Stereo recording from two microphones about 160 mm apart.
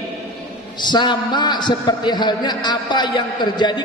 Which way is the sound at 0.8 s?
30° left (ahead or behind).